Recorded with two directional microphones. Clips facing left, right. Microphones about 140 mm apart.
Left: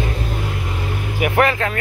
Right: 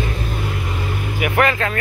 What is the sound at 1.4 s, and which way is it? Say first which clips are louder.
Speech: right 1 dB; 20° left (ahead or behind).